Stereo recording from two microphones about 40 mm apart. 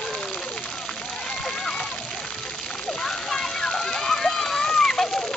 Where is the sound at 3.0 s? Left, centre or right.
Centre.